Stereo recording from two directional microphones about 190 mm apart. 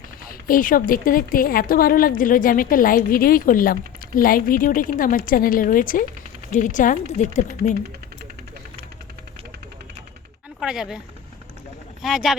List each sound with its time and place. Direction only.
0.3 s speech: 50° left (ahead or behind)
10.6 s speech: centre (ahead or behind)
12.0 s speech: centre (ahead or behind)